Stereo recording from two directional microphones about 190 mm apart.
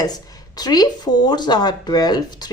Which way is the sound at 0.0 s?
20° left (ahead or behind).